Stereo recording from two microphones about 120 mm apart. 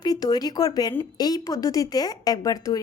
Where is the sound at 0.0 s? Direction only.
35° left (ahead or behind).